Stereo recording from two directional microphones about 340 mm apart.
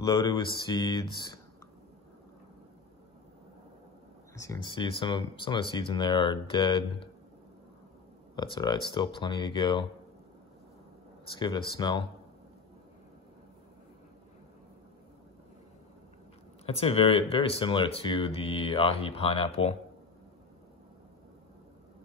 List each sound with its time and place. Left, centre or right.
0.0 s speech: centre
4.4 s speech: centre
8.4 s speech: centre
11.3 s speech: centre
16.6 s speech: centre